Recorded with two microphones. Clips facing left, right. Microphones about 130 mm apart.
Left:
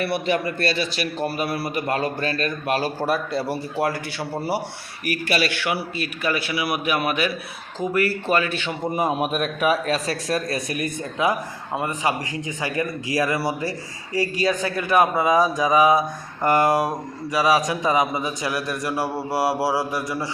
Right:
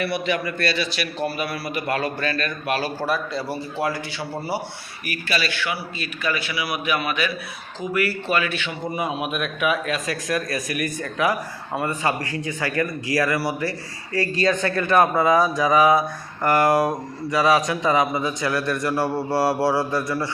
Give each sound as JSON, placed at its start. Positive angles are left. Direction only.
{"t": 0.3, "sound": "a man's voice", "side_deg": 35}
{"t": 3.8, "sound": "a man's voice", "side_deg": 60}